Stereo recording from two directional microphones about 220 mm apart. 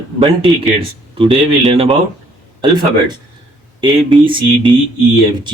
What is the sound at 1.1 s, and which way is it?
Speech, 25° right (ahead or behind).